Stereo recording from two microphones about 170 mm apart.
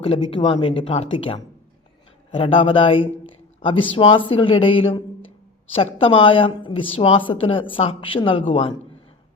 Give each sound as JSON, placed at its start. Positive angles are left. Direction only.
{"t": 0.0, "sound": "a woman's voice", "side_deg": 35}